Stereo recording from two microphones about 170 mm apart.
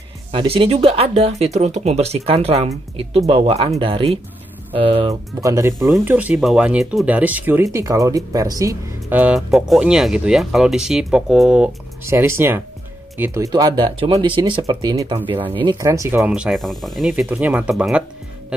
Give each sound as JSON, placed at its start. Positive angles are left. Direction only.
{"t": 0.3, "sound": "speech", "side_deg": -30}
{"t": 5.4, "sound": "speech", "side_deg": -20}
{"t": 5.8, "sound": "speech", "side_deg": 0}
{"t": 9.2, "sound": "speech", "side_deg": -5}
{"t": 16.3, "sound": "speech", "side_deg": -5}